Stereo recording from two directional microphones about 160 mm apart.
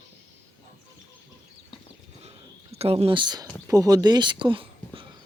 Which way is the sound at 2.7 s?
40° right (ahead or behind).